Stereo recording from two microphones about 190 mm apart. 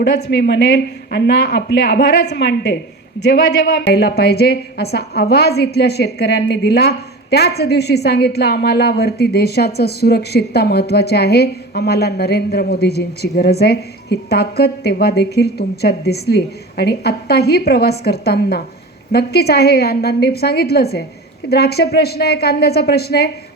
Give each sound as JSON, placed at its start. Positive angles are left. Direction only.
{"t": 0.0, "sound": "a woman's voice", "side_deg": 65}